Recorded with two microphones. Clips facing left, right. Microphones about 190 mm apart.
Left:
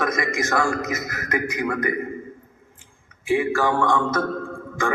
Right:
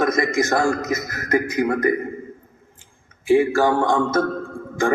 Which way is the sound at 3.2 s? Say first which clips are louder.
Right 5 dB; 40° right (ahead or behind).